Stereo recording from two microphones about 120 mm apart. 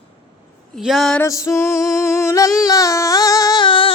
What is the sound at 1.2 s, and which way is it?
Female singing, 25° left (ahead or behind).